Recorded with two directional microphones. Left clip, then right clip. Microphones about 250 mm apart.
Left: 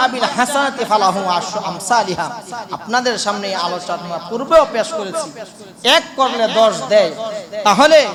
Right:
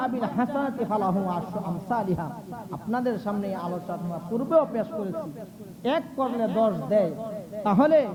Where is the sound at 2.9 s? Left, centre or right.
Centre.